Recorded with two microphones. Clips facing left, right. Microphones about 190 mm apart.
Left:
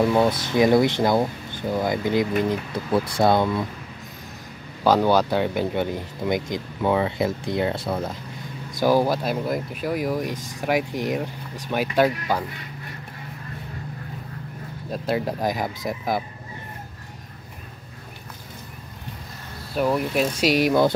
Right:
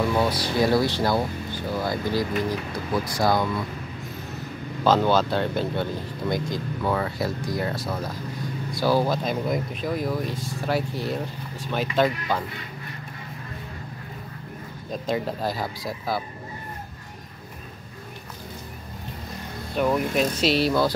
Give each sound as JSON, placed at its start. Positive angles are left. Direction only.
{"t": 0.1, "sound": "speech", "side_deg": 20}
{"t": 4.8, "sound": "speech", "side_deg": 15}
{"t": 8.7, "sound": "speech", "side_deg": 15}
{"t": 14.9, "sound": "speech", "side_deg": 5}
{"t": 19.7, "sound": "speech", "side_deg": 5}